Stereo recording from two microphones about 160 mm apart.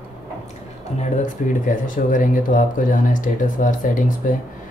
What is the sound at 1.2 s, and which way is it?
Speech, 55° left (ahead or behind).